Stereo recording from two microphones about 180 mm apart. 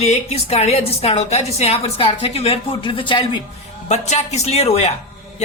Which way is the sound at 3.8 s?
40° left (ahead or behind).